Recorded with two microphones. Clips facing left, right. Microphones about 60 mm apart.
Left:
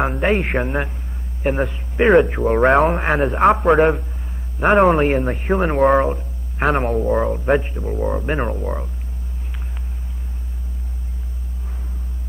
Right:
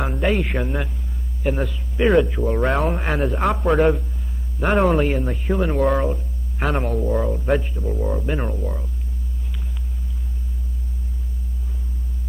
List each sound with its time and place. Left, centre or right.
0.0 s a man's voice: left
7.9 s speech: left